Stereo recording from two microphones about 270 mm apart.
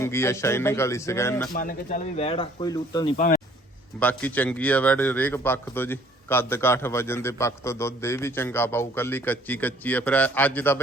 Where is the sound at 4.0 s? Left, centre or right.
Centre.